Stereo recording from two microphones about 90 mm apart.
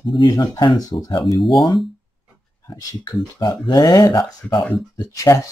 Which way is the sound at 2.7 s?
40° left (ahead or behind).